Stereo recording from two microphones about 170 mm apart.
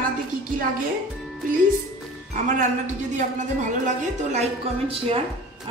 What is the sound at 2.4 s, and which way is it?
A woman's voice, 45° right (ahead or behind).